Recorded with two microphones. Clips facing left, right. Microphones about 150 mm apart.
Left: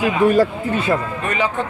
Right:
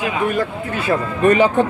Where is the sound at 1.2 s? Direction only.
35° right (ahead or behind).